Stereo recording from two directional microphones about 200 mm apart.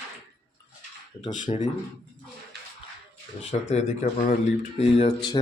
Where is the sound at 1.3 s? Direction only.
40° left (ahead or behind).